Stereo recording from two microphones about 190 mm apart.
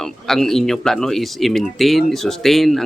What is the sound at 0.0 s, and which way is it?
Speech, centre (ahead or behind).